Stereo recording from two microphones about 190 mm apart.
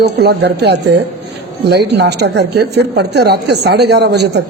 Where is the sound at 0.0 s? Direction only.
60° right (ahead or behind).